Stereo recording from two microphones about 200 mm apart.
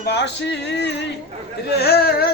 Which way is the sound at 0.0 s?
60° left (ahead or behind).